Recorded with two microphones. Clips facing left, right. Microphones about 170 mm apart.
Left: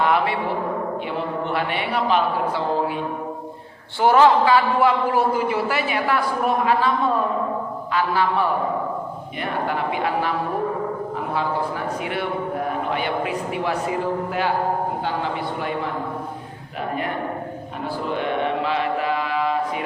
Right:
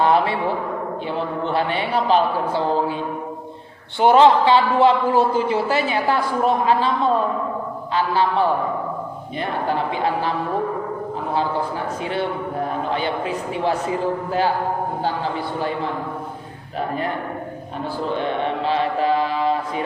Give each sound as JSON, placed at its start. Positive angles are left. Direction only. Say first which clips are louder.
{"t": 0.0, "sound": "a sound", "louder": "right 3 dB", "side_deg": -30}
{"t": 1.5, "sound": "a man's voice", "louder": "right 2 dB", "side_deg": -30}
{"t": 4.0, "sound": "a man's voice", "louder": "right 2 dB", "side_deg": -20}
{"t": 7.9, "sound": "a man's voice", "louder": "right 2 dB", "side_deg": -30}
{"t": 9.6, "sound": "a man's voice", "louder": "right 3 dB", "side_deg": -30}
{"t": 12.9, "sound": "a man's voice", "louder": "right 1 dB", "side_deg": -30}
{"t": 18.1, "sound": "mantra", "louder": "even", "side_deg": -30}